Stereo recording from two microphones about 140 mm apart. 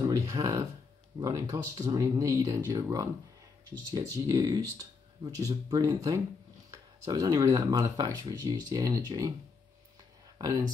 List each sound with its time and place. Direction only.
0.0 s a sound: 25° right (ahead or behind)
1.2 s speech: 25° right (ahead or behind)
10.4 s speech: 25° right (ahead or behind)